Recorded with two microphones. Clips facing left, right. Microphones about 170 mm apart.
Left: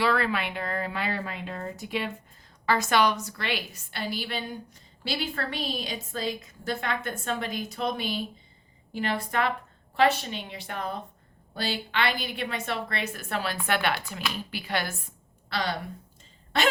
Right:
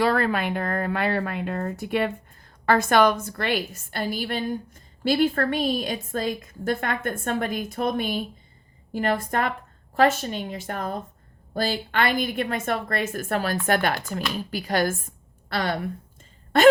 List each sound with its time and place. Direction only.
0.0 s a woman's voice: 45° right (ahead or behind)